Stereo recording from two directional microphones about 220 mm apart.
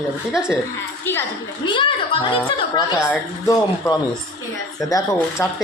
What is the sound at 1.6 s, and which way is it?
A woman's voice, 20° left (ahead or behind).